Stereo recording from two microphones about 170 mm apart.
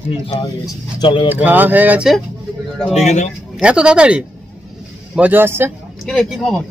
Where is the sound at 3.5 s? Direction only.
5° right (ahead or behind).